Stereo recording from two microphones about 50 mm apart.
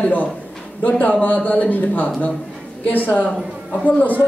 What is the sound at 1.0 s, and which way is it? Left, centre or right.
A man's voice, left.